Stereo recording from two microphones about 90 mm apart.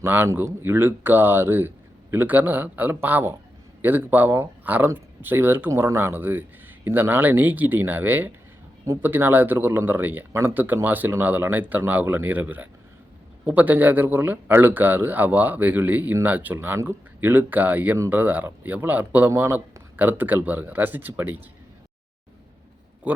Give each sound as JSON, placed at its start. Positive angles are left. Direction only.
{"t": 0.0, "sound": "speech", "side_deg": -25}
{"t": 23.1, "sound": "speech", "side_deg": -15}